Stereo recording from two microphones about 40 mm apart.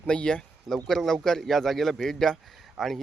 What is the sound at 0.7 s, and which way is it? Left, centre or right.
A man's voice, centre.